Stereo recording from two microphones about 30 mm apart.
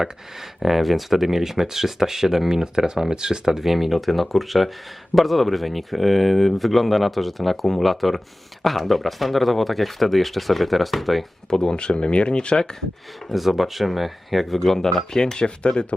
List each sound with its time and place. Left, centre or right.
0.0 s speech: centre
11.5 s speech: left
13.2 s speech: centre
15.1 s speech: left